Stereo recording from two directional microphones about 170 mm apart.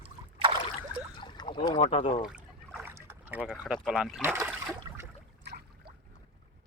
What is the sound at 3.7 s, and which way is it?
Speech, centre (ahead or behind).